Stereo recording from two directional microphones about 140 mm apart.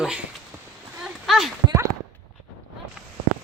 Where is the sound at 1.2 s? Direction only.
Centre (ahead or behind).